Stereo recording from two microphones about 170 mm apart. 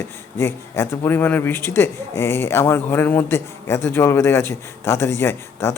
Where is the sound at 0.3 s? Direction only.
15° left (ahead or behind).